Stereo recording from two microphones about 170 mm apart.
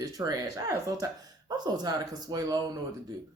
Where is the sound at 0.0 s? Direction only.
20° right (ahead or behind).